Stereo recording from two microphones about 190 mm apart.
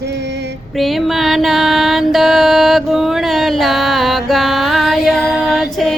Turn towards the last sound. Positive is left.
turn(degrees=0)  # may be behind; listen again after turning